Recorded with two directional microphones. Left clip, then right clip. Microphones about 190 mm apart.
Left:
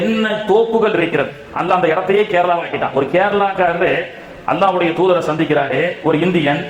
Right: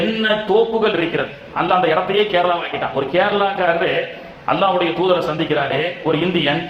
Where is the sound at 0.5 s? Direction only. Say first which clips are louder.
Left 5 dB; 30° left (ahead or behind).